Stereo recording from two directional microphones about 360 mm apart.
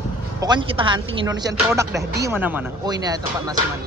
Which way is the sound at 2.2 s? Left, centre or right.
Centre.